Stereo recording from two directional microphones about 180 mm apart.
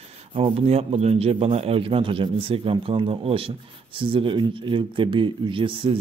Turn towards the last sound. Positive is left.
turn(degrees=-30)  # may be behind; listen again after turning